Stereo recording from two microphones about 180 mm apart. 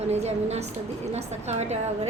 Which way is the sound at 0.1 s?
35° right (ahead or behind).